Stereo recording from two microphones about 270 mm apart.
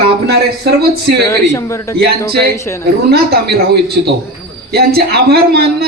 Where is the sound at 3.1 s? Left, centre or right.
Right.